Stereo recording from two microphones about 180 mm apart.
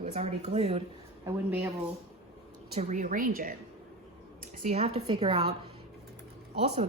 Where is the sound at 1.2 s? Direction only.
10° right (ahead or behind).